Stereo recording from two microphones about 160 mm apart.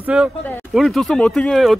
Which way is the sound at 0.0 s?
5° right (ahead or behind).